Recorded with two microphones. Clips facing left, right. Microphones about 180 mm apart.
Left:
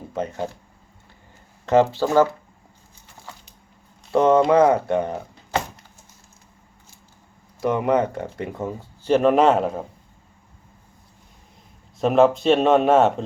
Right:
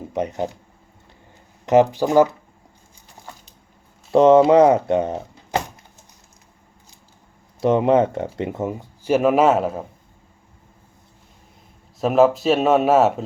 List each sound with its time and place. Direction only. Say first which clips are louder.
0.1 s speech: right 3 dB; 20° right (ahead or behind)
1.6 s speech: right 2 dB; 15° right (ahead or behind)
4.1 s speech: right 4 dB; 20° right (ahead or behind)
7.6 s speech: right 4 dB; 25° right (ahead or behind); by 9.8 s centre (ahead or behind)
11.9 s speech: right 1 dB; centre (ahead or behind)